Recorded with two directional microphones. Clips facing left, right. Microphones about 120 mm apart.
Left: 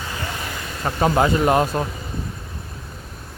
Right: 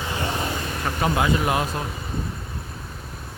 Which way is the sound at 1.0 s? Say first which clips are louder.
Left 5 dB; 40° left (ahead or behind).